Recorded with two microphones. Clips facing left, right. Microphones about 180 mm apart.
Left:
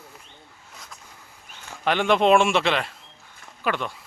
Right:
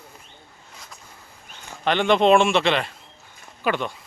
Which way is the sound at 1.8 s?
5° left (ahead or behind).